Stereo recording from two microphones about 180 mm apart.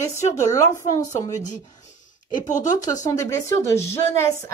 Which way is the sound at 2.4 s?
45° left (ahead or behind).